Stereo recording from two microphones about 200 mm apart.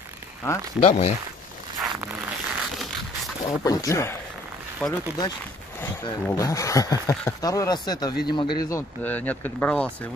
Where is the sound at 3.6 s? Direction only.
15° left (ahead or behind).